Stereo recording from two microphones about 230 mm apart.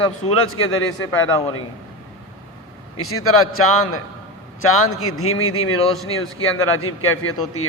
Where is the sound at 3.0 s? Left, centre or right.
Left.